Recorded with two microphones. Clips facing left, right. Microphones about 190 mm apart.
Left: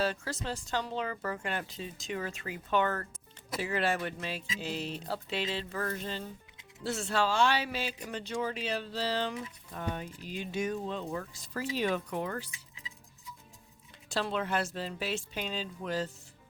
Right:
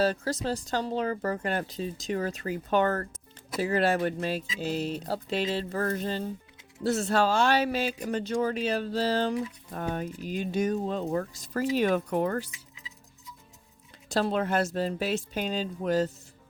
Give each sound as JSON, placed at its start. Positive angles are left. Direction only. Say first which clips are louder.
{"t": 0.0, "sound": "speech", "louder": "right 6 dB", "side_deg": -40}
{"t": 14.1, "sound": "speech", "louder": "right 6 dB", "side_deg": -45}